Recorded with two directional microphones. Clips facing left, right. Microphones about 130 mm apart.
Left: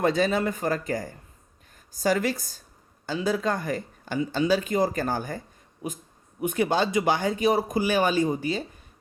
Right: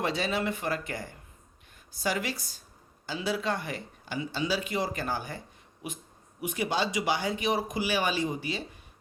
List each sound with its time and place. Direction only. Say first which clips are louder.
0.0 s speech: left 6 dB; 45° left (ahead or behind)
6.4 s speech: left 6 dB; 50° left (ahead or behind)